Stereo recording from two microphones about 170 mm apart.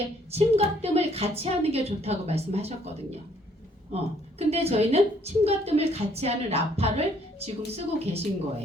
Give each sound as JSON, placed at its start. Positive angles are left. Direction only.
{"t": 0.3, "sound": "a woman's voice", "side_deg": -35}
{"t": 3.9, "sound": "a woman's voice", "side_deg": -35}